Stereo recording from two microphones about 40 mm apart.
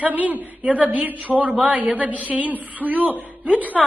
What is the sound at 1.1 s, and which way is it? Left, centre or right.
Speech, right.